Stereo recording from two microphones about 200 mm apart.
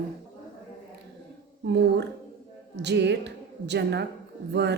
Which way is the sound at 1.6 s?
60° right (ahead or behind).